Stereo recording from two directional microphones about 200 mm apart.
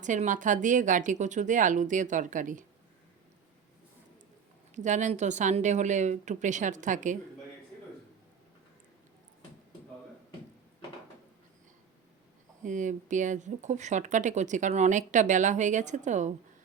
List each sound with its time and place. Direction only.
0.0 s speech: 40° right (ahead or behind)
4.7 s speech: 35° right (ahead or behind)
12.6 s speech: 40° right (ahead or behind)